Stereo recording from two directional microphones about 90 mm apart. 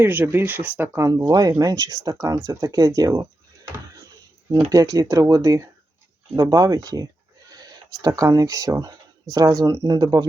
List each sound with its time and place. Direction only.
0.0 s speech: 20° right (ahead or behind)
1.0 s speech: 45° right (ahead or behind)
4.7 s speech: 40° right (ahead or behind)